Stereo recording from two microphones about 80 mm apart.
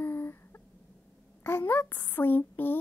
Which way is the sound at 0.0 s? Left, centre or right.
Left.